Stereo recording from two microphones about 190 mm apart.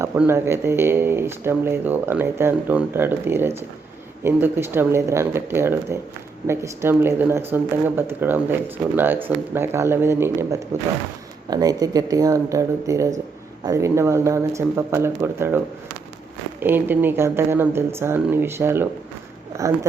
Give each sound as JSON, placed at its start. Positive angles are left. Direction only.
{"t": 0.0, "sound": "speech", "side_deg": -15}
{"t": 16.6, "sound": "speech", "side_deg": -10}